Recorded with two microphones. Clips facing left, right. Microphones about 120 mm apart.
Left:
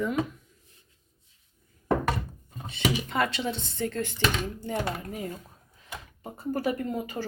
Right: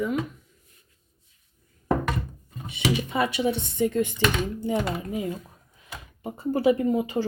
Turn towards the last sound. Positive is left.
turn(degrees=-15)  # may be behind; listen again after turning